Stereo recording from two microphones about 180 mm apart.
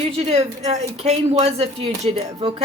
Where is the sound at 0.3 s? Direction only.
40° right (ahead or behind).